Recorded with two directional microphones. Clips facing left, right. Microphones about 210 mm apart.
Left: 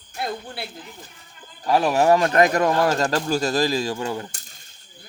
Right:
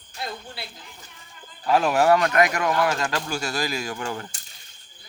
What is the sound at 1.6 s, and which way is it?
Speech, 15° left (ahead or behind).